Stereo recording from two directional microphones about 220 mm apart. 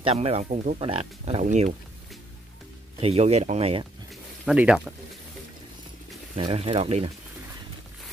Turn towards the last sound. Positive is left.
turn(degrees=-25)  # may be behind; listen again after turning